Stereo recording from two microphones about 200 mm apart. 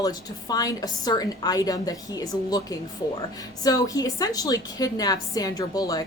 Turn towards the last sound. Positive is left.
turn(degrees=20)  # may be behind; listen again after turning